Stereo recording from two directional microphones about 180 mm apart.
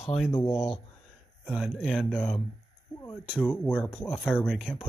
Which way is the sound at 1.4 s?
Centre (ahead or behind).